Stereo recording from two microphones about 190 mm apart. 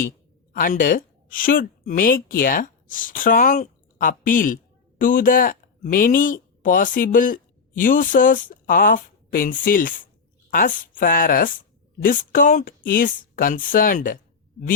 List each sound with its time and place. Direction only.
0.5 s a woman's voice: 45° left (ahead or behind)